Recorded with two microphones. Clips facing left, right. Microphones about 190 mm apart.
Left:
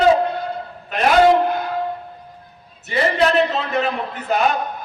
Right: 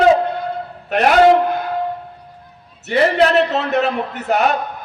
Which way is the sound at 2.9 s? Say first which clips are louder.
Right 4 dB; 70° right (ahead or behind).